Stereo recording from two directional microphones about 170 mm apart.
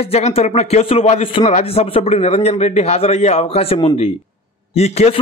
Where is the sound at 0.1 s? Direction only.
35° left (ahead or behind).